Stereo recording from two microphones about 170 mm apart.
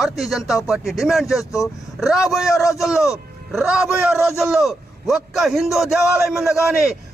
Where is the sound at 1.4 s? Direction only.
20° left (ahead or behind).